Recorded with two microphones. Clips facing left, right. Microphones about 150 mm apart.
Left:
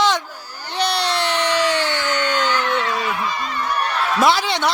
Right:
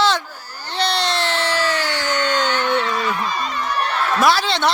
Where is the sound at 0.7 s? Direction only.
15° left (ahead or behind).